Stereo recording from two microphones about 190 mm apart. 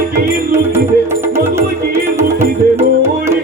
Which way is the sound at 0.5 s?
15° right (ahead or behind).